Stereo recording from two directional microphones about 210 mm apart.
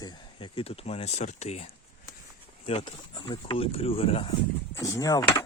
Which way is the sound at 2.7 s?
25° left (ahead or behind).